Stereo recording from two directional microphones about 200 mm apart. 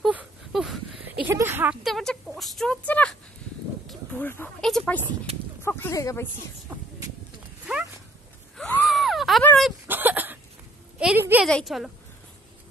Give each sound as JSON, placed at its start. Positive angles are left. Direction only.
{"t": 0.0, "sound": "a sound", "side_deg": -5}
{"t": 1.2, "sound": "speech", "side_deg": -10}
{"t": 5.0, "sound": "speech", "side_deg": -30}
{"t": 5.6, "sound": "speech", "side_deg": 10}
{"t": 8.5, "sound": "a sound", "side_deg": 5}
{"t": 11.0, "sound": "a woman's voice", "side_deg": -5}